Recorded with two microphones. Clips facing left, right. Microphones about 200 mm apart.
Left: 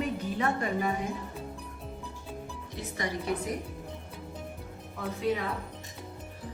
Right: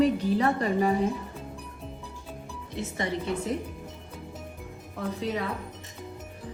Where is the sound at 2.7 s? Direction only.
25° right (ahead or behind).